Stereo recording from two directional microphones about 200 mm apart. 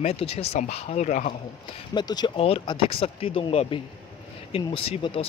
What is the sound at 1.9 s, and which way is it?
Speech, 20° left (ahead or behind).